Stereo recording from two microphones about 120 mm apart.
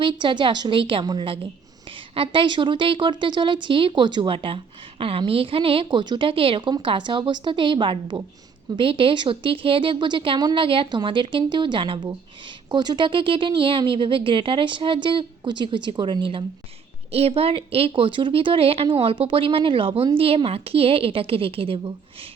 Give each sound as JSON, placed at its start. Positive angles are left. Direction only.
{"t": 0.0, "sound": "a woman's voice", "side_deg": -45}
{"t": 17.1, "sound": "a woman's voice", "side_deg": -55}